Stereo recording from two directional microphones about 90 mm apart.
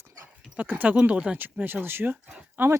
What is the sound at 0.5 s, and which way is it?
Speech, 15° right (ahead or behind).